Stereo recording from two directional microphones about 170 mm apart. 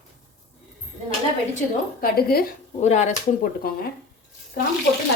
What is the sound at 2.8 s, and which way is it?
Speech, 45° left (ahead or behind).